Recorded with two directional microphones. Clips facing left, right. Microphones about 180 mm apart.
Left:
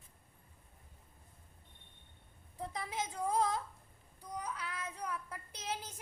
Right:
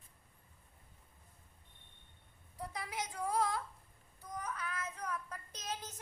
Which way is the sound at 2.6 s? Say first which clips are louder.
Left 2 dB; 25° left (ahead or behind).